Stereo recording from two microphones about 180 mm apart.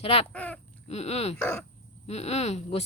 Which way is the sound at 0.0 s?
35° left (ahead or behind).